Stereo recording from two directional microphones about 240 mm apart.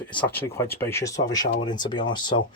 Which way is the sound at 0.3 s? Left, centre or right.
Centre.